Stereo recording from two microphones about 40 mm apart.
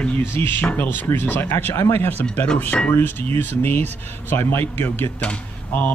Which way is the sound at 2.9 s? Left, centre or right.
Left.